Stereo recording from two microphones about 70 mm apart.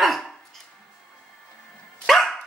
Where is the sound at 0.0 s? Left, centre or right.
Centre.